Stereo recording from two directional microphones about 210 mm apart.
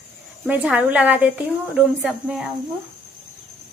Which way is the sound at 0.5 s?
5° right (ahead or behind).